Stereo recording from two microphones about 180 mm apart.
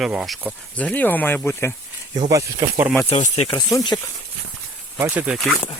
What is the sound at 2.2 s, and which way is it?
Speech, 20° right (ahead or behind).